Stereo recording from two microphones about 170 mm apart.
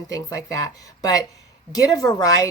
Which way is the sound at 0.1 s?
20° left (ahead or behind).